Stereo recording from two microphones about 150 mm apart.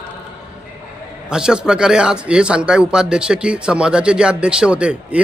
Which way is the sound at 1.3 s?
5° right (ahead or behind).